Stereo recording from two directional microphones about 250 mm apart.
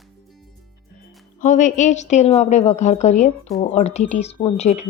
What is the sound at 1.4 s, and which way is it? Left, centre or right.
Speech, left.